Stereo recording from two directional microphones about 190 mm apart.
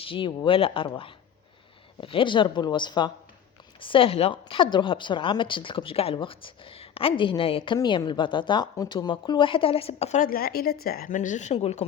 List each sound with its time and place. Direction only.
0.0 s a woman's voice: 30° left (ahead or behind)
2.0 s a woman's voice: 25° left (ahead or behind)